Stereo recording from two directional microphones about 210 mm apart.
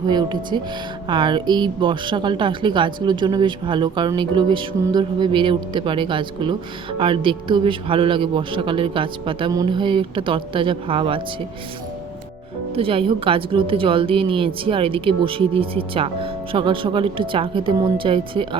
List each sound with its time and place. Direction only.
0.1 s a woman's voice: 20° right (ahead or behind)
12.7 s a woman's voice: 25° right (ahead or behind)